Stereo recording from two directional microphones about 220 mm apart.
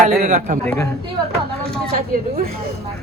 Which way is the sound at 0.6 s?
5° left (ahead or behind).